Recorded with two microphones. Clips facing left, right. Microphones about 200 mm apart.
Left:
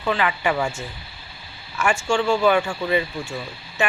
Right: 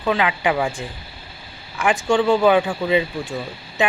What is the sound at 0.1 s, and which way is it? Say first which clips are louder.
Speech: right 2 dB; 15° right (ahead or behind).